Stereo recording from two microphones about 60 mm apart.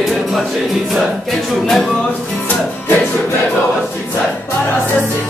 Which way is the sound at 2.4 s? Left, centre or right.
Left.